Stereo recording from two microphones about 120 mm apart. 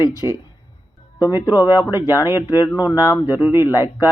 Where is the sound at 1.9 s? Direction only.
25° left (ahead or behind).